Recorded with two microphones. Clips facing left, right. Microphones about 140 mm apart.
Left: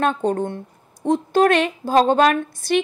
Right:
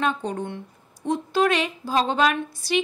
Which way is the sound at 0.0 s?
50° left (ahead or behind).